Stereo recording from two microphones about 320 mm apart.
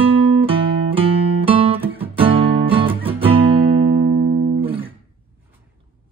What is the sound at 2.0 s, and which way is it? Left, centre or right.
Guitar, centre.